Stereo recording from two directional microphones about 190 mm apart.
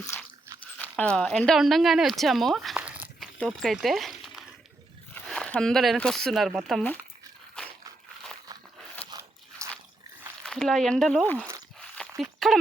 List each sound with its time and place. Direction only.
0.1 s crunch: 10° left (ahead or behind)
0.8 s speech: 5° left (ahead or behind)
9.0 s biting: 20° right (ahead or behind)
10.4 s speech: 5° left (ahead or behind)
11.8 s a sound: centre (ahead or behind)